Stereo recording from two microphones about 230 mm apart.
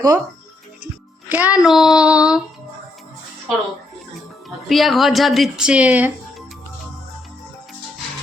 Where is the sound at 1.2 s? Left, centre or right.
Centre.